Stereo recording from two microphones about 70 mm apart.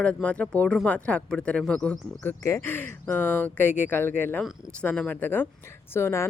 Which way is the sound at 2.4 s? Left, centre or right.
Left.